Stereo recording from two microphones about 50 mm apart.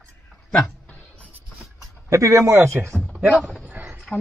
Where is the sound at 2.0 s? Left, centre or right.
Right.